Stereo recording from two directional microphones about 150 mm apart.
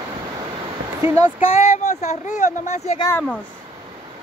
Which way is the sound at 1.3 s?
55° left (ahead or behind).